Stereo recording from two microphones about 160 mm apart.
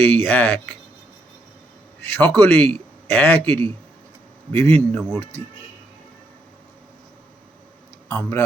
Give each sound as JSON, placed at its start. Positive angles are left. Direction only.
{"t": 0.0, "sound": "a man's voice", "side_deg": 10}
{"t": 2.0, "sound": "a man's voice", "side_deg": 15}
{"t": 8.0, "sound": "a man's voice", "side_deg": 10}